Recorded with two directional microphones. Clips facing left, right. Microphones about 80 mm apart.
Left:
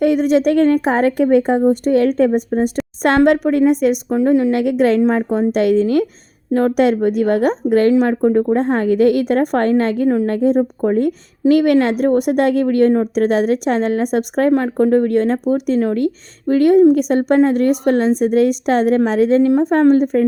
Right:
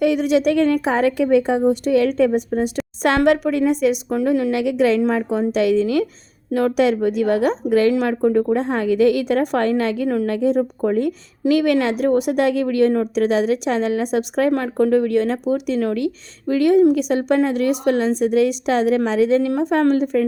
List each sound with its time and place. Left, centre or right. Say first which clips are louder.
0.0 s a woman's voice: left 3 dB; left
4.1 s a woman's voice: left 4 dB; left
4.5 s a woman's voice: left 3 dB; left
8.5 s a woman's voice: left 3 dB; left
14.5 s a woman's voice: left 4 dB; left